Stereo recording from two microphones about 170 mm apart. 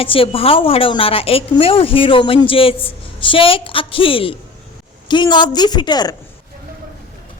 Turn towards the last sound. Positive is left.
turn(degrees=25)  # may be behind; listen again after turning